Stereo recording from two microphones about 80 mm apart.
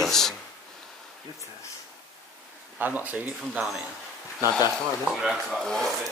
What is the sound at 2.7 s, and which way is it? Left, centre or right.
Speech, right.